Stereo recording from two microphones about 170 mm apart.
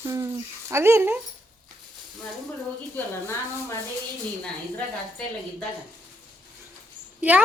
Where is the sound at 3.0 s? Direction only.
15° left (ahead or behind).